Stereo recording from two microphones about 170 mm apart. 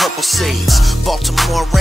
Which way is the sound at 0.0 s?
Centre (ahead or behind).